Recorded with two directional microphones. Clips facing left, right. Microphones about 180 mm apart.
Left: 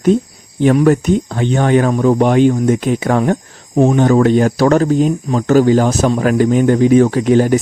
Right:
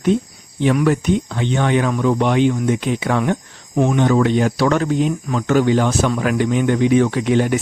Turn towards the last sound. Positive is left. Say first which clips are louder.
# left 5 dB
turn(degrees=40)  # may be behind; listen again after turning